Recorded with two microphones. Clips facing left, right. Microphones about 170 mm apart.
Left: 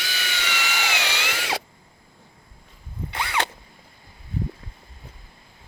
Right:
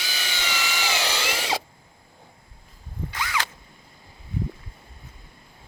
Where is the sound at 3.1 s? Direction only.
30° left (ahead or behind).